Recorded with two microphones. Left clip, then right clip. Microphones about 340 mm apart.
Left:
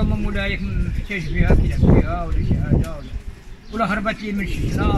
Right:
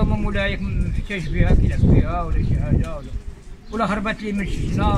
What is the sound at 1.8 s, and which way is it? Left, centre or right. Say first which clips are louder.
Speech: left 4 dB; left.